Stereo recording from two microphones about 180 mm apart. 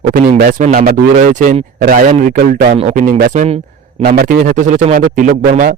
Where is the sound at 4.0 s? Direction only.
60° right (ahead or behind).